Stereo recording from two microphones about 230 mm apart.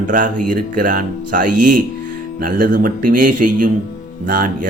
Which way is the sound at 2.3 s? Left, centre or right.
Right.